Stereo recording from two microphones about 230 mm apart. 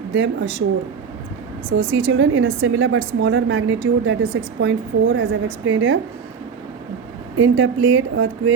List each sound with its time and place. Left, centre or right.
0.1 s a woman's voice: right
1.7 s a woman's voice: right
7.3 s a woman's voice: right